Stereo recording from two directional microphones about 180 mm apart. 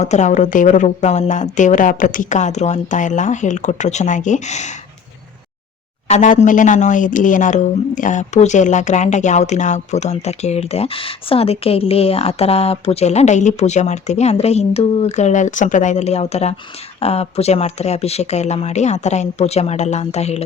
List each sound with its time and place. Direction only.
0.0 s speech: 40° left (ahead or behind)
6.1 s a woman's voice: 45° left (ahead or behind)